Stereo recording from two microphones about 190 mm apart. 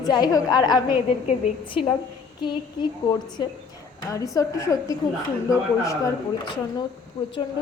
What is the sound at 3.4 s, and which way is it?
A woman's voice, 20° left (ahead or behind).